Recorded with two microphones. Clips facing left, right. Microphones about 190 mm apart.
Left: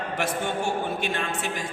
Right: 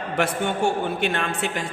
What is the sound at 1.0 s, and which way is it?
Speech, 60° right (ahead or behind).